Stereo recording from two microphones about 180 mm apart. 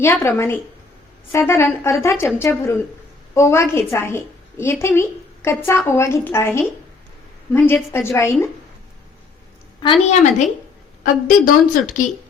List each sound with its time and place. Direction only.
0.0 s a woman's voice: 15° left (ahead or behind)
9.8 s a woman's voice: 35° left (ahead or behind)